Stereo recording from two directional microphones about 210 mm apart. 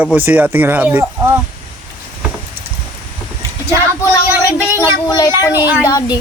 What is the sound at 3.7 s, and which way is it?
Speech, 15° left (ahead or behind).